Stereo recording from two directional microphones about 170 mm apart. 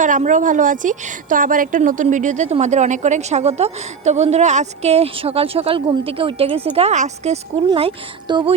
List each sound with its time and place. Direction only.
0.0 s a woman's voice: 50° right (ahead or behind); by 8.5 s 30° right (ahead or behind)